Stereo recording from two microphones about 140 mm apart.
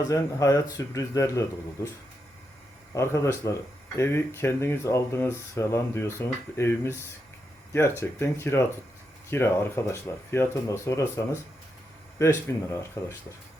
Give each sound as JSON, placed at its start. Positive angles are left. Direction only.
{"t": 0.1, "sound": "speech", "side_deg": 25}
{"t": 2.9, "sound": "speech", "side_deg": 20}